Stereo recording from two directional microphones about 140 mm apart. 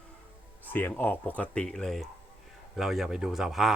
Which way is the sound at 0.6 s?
15° left (ahead or behind).